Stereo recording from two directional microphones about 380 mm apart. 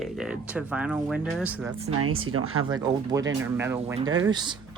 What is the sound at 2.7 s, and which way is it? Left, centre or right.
Speech, centre.